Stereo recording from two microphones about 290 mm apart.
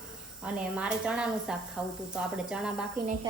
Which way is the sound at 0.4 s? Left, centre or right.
Centre.